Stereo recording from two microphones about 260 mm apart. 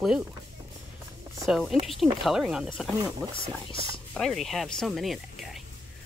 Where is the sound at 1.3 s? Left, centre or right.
Centre.